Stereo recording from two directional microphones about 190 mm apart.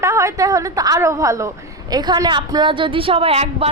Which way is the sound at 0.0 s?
15° right (ahead or behind).